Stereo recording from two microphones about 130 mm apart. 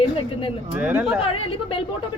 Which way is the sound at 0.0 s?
45° left (ahead or behind).